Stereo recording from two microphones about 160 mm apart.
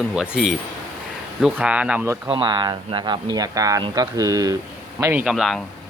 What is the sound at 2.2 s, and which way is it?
Speech, 30° right (ahead or behind).